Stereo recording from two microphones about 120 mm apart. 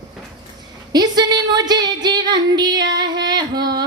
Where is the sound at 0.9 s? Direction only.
35° right (ahead or behind).